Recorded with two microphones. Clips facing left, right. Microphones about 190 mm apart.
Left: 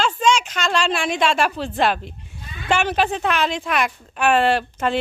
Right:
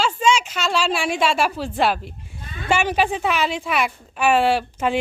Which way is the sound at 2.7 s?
10° right (ahead or behind).